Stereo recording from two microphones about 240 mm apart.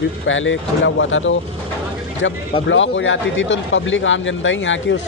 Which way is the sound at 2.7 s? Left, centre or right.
Left.